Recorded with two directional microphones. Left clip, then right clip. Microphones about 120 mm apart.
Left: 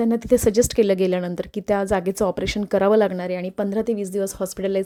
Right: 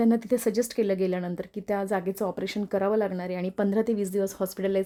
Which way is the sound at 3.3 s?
15° left (ahead or behind).